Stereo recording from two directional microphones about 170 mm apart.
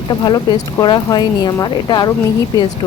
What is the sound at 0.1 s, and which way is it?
Speech, 25° left (ahead or behind).